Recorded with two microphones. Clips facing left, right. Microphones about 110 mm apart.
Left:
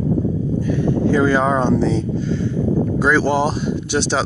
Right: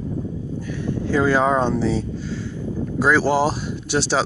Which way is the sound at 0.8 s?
75° left (ahead or behind).